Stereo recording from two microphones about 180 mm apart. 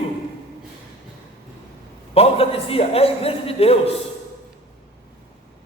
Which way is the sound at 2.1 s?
35° left (ahead or behind).